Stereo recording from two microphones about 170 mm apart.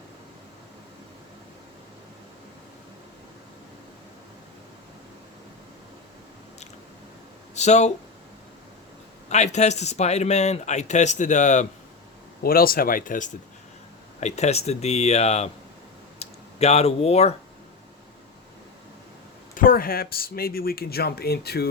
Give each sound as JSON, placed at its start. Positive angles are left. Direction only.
{"t": 7.5, "sound": "speech", "side_deg": 40}
{"t": 9.3, "sound": "speech", "side_deg": 40}
{"t": 12.4, "sound": "speech", "side_deg": 60}
{"t": 19.5, "sound": "speech", "side_deg": 55}